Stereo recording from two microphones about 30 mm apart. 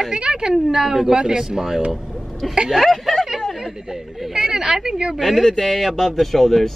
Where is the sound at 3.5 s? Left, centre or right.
Centre.